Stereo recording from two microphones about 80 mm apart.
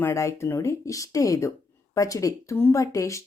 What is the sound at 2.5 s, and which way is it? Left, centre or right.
Speech, left.